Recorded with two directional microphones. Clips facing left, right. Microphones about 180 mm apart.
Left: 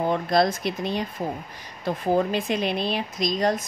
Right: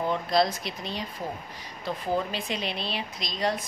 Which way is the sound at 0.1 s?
50° left (ahead or behind).